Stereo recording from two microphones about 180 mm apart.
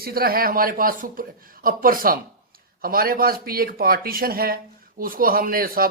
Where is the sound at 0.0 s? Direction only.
55° right (ahead or behind).